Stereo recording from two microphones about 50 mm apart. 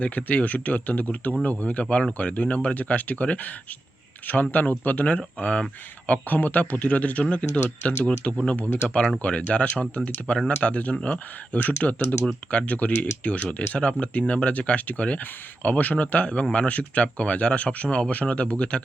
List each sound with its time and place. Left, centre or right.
0.0 s a man's voice: left
4.5 s a man's voice: left